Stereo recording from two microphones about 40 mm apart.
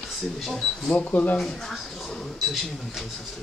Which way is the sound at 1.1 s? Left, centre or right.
Left.